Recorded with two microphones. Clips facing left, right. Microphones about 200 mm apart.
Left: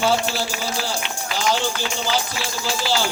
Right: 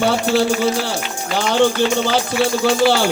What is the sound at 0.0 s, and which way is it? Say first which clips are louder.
Speech: right 5 dB; 60° right (ahead or behind).